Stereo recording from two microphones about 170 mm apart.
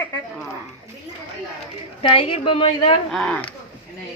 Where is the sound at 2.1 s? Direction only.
30° left (ahead or behind).